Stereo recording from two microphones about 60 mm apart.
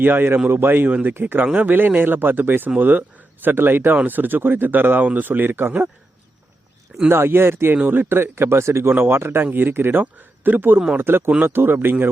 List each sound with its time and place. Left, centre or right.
0.0 s speech: right
7.1 s speech: right